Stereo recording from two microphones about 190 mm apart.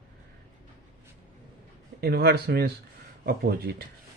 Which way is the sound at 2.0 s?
60° right (ahead or behind).